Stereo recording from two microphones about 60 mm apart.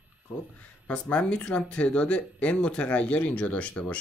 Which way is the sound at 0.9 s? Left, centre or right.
Centre.